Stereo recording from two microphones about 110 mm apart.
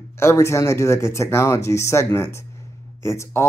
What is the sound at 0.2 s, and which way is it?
Speech, 25° left (ahead or behind).